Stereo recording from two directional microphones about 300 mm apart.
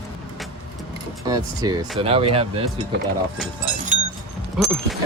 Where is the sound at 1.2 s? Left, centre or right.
Centre.